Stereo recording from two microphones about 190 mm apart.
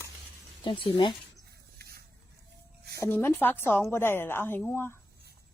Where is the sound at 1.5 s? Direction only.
55° right (ahead or behind).